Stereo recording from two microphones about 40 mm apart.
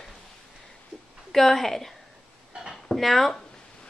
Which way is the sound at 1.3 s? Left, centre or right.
Centre.